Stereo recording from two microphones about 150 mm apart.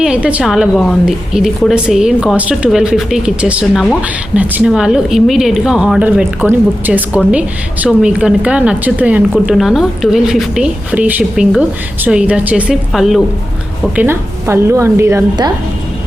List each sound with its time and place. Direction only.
0.0 s a woman's voice: 10° right (ahead or behind)
13.9 s a woman's voice: 15° right (ahead or behind)